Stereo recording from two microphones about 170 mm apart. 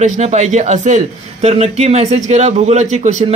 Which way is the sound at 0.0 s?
45° right (ahead or behind).